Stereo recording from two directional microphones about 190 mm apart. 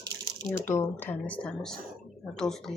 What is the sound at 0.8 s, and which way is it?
Speech, 10° left (ahead or behind).